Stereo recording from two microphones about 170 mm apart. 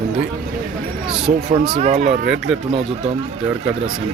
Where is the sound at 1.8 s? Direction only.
40° right (ahead or behind).